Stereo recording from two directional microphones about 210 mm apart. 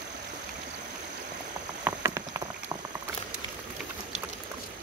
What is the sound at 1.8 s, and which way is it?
Clip-clop, 15° right (ahead or behind).